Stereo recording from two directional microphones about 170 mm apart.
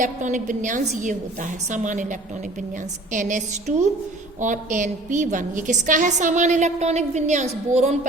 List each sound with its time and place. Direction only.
0.0 s a woman's voice: 45° right (ahead or behind)